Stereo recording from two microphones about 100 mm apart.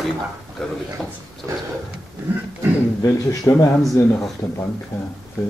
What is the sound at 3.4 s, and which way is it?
Speech, 35° left (ahead or behind).